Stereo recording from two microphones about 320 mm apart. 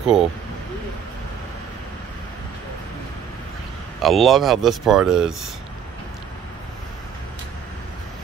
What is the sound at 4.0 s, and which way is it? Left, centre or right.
Speech, centre.